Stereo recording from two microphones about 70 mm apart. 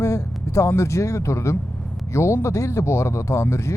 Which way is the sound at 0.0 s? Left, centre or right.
Left.